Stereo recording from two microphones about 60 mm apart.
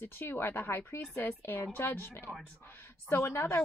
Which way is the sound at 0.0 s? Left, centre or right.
Left.